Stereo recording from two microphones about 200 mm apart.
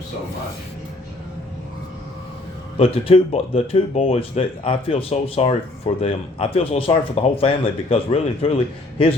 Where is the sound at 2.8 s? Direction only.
30° left (ahead or behind).